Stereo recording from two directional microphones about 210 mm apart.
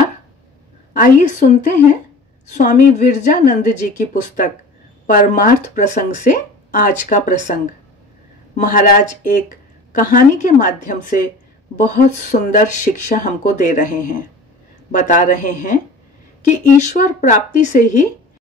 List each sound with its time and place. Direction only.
0.9 s speech: 35° left (ahead or behind)
8.5 s speech: 40° left (ahead or behind)